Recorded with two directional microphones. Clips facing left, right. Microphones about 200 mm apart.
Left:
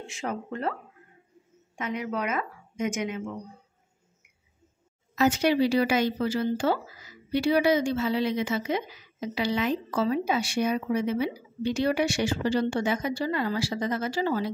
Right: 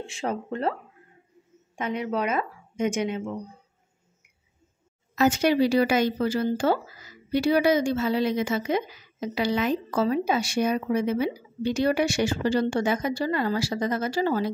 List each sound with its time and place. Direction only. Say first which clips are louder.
0.0 s a woman's voice: right 3 dB; 30° right (ahead or behind)
1.8 s a woman's voice: right 3 dB; 30° right (ahead or behind)
5.1 s a woman's voice: right 2 dB; 45° right (ahead or behind)